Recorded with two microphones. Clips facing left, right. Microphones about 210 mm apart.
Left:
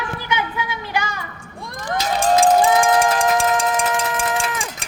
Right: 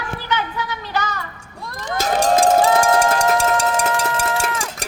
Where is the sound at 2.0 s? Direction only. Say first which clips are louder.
Even; 50° right (ahead or behind).